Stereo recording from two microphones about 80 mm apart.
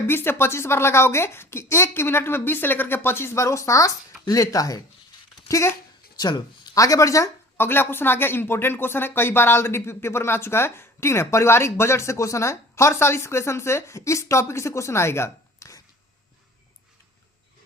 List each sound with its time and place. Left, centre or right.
0.1 s speech: left
6.1 s speech: left
6.7 s speech: left
7.5 s speech: left